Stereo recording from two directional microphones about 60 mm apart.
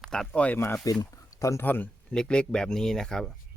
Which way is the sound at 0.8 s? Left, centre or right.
Left.